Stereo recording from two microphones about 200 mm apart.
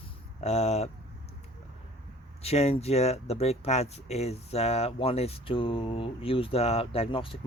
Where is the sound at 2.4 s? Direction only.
30° left (ahead or behind).